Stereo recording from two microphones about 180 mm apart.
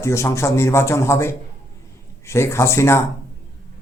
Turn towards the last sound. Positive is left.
turn(degrees=15)  # may be behind; listen again after turning